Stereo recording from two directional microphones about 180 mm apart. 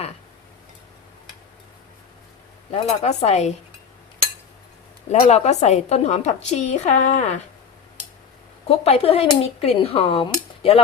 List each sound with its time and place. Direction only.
2.7 s a woman's voice: 35° left (ahead or behind)
5.2 s a woman's voice: 35° left (ahead or behind)
8.6 s a woman's voice: 35° left (ahead or behind)